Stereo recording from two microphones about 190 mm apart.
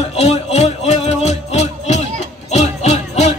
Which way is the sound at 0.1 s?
35° left (ahead or behind).